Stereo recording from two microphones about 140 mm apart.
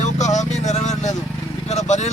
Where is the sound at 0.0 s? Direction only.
60° left (ahead or behind).